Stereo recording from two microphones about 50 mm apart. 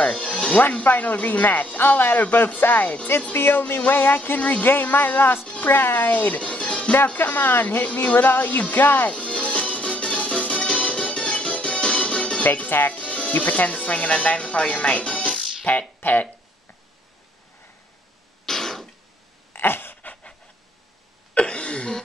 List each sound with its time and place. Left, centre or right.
0.0 s speech: left
7.2 s speech: left
7.8 s speech: left
9.1 s music: left
12.4 s speech: left
12.9 s music: left
13.3 s speech: left
18.4 s throat clearing: centre
19.5 s a sound: left
21.4 s a sound: left